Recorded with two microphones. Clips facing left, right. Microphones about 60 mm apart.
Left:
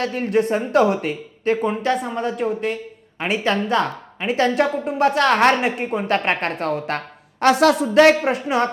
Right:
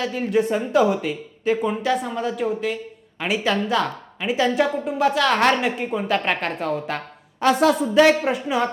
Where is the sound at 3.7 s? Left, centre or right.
Left.